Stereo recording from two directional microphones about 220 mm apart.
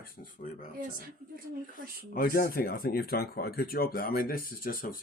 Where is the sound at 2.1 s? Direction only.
40° left (ahead or behind).